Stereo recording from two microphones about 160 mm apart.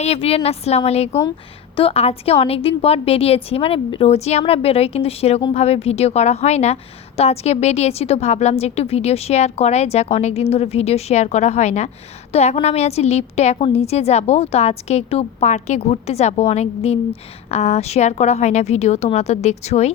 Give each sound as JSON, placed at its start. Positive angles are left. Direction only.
{"t": 0.0, "sound": "a woman's voice", "side_deg": 40}